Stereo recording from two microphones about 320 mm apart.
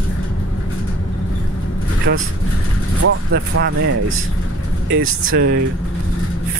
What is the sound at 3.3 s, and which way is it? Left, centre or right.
Speech, right.